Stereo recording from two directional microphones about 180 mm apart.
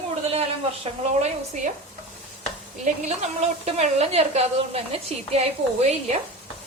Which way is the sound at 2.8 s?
40° right (ahead or behind).